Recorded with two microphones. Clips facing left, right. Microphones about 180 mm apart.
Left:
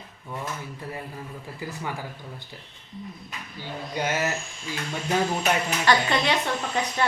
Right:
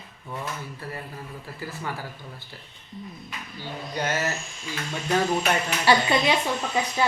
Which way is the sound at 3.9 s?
15° left (ahead or behind).